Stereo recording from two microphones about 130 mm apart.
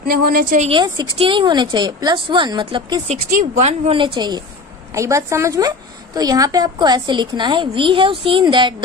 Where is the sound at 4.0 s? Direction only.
35° right (ahead or behind).